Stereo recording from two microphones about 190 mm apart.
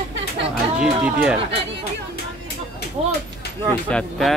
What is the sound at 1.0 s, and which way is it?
Speech, 5° right (ahead or behind).